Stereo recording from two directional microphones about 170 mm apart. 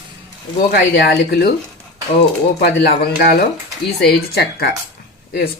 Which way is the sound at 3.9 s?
70° left (ahead or behind).